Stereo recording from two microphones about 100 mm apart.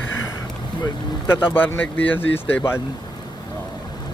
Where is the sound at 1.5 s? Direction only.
20° left (ahead or behind).